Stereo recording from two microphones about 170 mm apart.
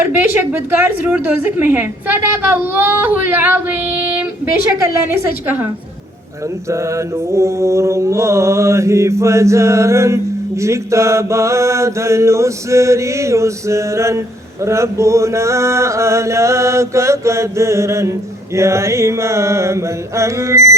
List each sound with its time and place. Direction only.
0.2 s a woman's voice: 15° right (ahead or behind)
6.7 s a woman's voice: 15° right (ahead or behind)